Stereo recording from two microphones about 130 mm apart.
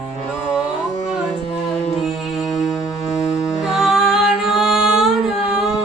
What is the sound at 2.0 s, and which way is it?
Music, centre (ahead or behind).